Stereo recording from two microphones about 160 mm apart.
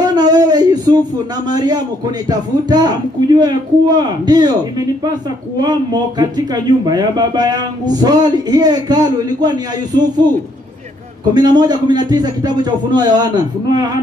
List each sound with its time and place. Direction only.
0.1 s a sound: 25° right (ahead or behind)
1.5 s a man's voice: 25° right (ahead or behind)
11.3 s a man's voice: 25° right (ahead or behind)